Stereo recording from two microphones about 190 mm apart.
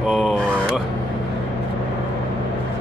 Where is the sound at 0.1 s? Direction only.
Centre (ahead or behind).